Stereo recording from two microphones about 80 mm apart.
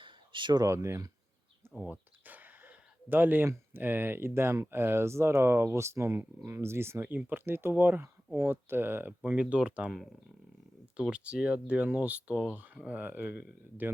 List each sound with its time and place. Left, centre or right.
0.0 s a sound: right
0.6 s speech: right
1.9 s a sound: right
3.7 s speech: right
9.9 s speech: centre
10.9 s speech: centre